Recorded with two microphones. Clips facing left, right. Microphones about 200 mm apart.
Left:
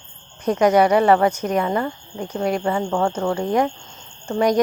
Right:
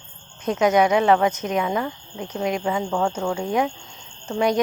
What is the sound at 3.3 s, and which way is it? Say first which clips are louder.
Speech: left 3 dB; 10° right (ahead or behind).